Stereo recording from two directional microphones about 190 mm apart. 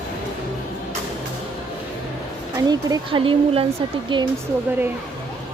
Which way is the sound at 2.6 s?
20° right (ahead or behind).